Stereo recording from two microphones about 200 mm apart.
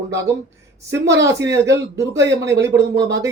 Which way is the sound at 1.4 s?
60° right (ahead or behind).